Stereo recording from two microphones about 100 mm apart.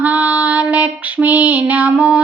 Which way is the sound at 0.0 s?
15° right (ahead or behind).